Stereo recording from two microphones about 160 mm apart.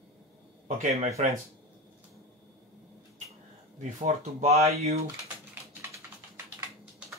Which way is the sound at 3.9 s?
40° right (ahead or behind).